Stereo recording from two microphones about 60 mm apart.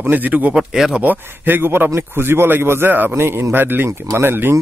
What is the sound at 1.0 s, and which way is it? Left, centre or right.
A man's voice, right.